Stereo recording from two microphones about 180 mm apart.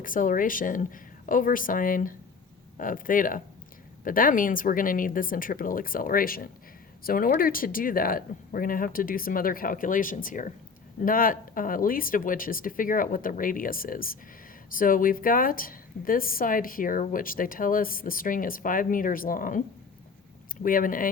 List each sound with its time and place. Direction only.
0.0 s a woman's voice: 50° left (ahead or behind)